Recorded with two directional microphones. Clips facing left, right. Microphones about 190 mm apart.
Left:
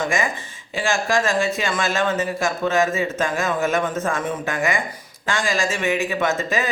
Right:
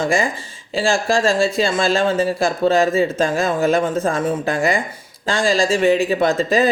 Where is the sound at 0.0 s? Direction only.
35° right (ahead or behind).